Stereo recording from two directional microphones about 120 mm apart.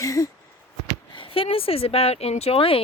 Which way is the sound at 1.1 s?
50° left (ahead or behind).